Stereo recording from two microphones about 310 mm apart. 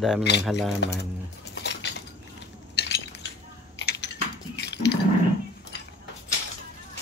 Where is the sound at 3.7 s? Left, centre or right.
Left.